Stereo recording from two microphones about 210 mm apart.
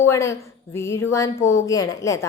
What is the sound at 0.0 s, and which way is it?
A woman's voice, 10° left (ahead or behind).